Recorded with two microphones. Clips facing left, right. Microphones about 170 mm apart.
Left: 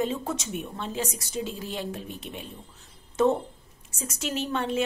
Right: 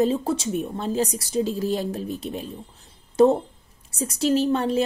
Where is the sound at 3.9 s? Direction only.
35° right (ahead or behind).